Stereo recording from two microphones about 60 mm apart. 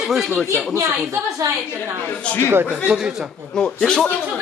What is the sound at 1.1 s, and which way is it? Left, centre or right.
Speech, right.